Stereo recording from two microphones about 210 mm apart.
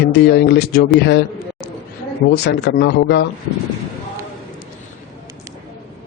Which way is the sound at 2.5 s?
50° left (ahead or behind).